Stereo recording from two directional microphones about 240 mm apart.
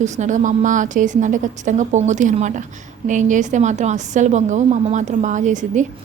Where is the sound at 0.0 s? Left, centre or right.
Right.